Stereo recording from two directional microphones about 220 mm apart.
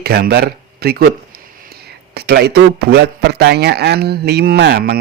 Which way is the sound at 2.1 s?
45° right (ahead or behind).